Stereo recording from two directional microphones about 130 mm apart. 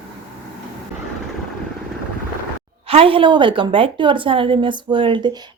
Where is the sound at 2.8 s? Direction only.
45° right (ahead or behind).